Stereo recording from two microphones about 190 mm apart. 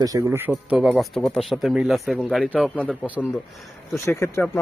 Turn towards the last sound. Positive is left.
turn(degrees=15)  # may be behind; listen again after turning